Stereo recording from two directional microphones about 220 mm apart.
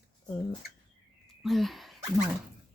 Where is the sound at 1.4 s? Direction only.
Centre (ahead or behind).